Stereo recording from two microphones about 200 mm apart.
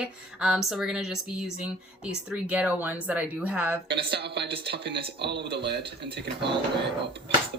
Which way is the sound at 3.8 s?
55° right (ahead or behind).